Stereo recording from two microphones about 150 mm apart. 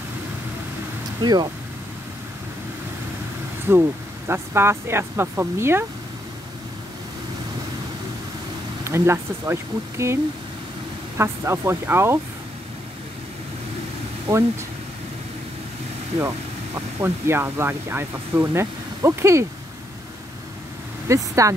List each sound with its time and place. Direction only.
1.2 s speech: 30° right (ahead or behind)
3.7 s speech: 15° right (ahead or behind)
8.8 s speech: 15° right (ahead or behind)
11.1 s speech: 20° right (ahead or behind)
16.2 s speech: 15° right (ahead or behind)
21.1 s speech: 20° right (ahead or behind)